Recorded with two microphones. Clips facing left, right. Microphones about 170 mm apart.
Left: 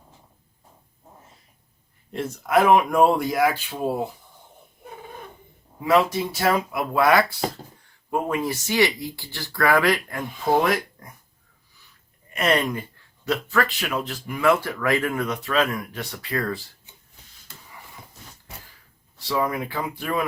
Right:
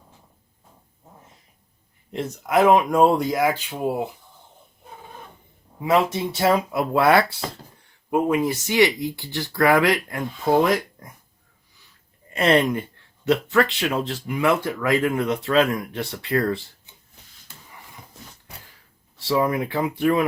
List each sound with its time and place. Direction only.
2.1 s speech: 20° right (ahead or behind)
5.8 s speech: 25° right (ahead or behind)
8.1 s speech: 15° right (ahead or behind)
12.3 s speech: 30° right (ahead or behind)
19.3 s speech: 25° right (ahead or behind)